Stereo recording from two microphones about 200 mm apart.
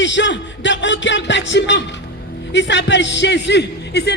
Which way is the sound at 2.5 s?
60° left (ahead or behind).